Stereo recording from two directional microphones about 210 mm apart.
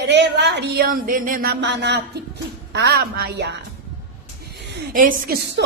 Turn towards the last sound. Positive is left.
turn(degrees=-50)  # may be behind; listen again after turning